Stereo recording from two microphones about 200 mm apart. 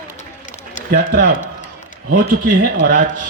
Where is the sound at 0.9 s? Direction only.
55° right (ahead or behind).